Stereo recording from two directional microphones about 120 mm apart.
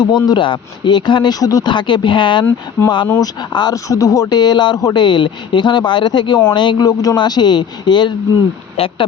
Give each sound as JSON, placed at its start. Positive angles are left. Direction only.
{"t": 0.3, "sound": "speech", "side_deg": 45}
{"t": 8.7, "sound": "speech", "side_deg": 50}